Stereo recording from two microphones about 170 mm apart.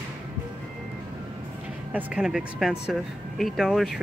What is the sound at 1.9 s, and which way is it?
Speech, 5° right (ahead or behind).